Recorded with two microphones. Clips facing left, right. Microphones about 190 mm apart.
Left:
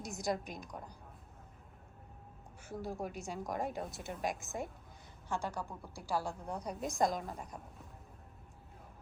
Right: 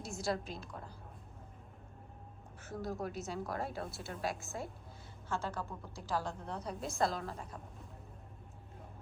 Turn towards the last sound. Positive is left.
turn(degrees=15)  # may be behind; listen again after turning